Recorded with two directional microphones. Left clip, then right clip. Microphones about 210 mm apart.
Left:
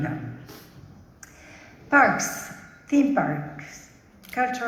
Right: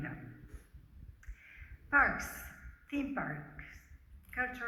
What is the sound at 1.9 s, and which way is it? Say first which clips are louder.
A woman's voice: left 11 dB; 50° left (ahead or behind).